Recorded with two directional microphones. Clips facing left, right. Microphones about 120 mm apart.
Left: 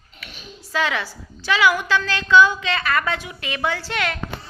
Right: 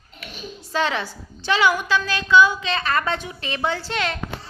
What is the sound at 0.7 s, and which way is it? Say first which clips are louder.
A woman's voice: even; 25° right (ahead or behind).